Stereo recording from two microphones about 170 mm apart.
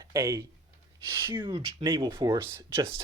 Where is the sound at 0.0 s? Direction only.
20° right (ahead or behind).